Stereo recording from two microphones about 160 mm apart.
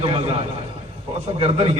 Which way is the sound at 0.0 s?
40° right (ahead or behind).